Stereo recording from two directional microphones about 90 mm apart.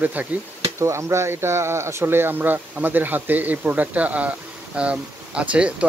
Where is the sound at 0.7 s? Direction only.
30° right (ahead or behind).